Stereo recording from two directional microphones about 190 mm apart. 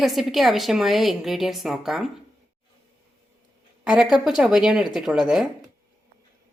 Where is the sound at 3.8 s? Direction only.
5° right (ahead or behind).